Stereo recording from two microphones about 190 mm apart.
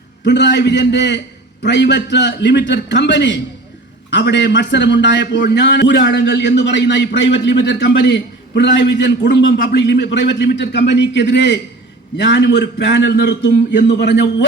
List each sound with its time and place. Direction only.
0.3 s a man's voice: 65° left (ahead or behind)